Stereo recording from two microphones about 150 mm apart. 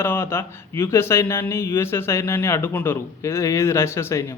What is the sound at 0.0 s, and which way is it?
Speech, 15° left (ahead or behind).